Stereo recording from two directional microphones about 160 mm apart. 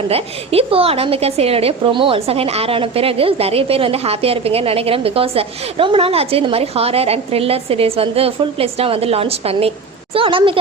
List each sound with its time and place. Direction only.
0.1 s a woman's voice: 35° right (ahead or behind)